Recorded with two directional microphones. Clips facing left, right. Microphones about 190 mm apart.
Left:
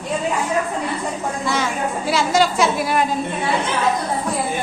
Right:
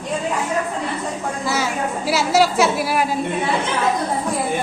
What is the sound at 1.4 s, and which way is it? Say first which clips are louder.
A woman's voice: even; 5° right (ahead or behind).